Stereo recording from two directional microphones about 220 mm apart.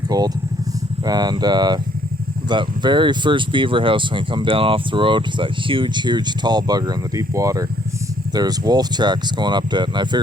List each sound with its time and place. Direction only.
0.1 s speech: 20° right (ahead or behind)